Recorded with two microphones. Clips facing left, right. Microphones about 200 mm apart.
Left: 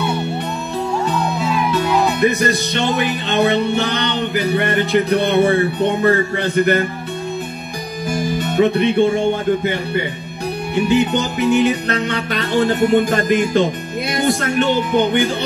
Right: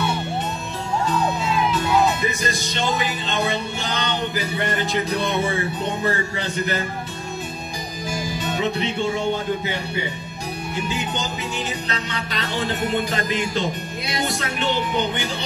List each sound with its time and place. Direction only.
2.1 s music: 60° left (ahead or behind)
8.1 s music: 55° left (ahead or behind)